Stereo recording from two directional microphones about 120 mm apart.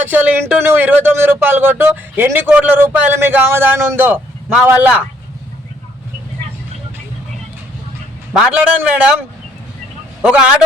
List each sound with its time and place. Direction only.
0.0 s speech: 15° right (ahead or behind)
8.3 s a man's voice: 5° right (ahead or behind)